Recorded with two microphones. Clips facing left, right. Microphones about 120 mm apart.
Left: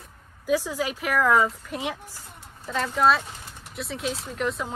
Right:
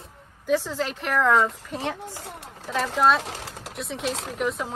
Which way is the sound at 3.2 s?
90° right.